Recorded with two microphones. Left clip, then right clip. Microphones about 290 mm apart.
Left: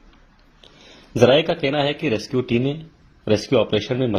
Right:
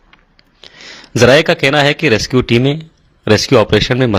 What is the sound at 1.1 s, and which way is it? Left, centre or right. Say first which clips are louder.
Speech: right 7 dB; right.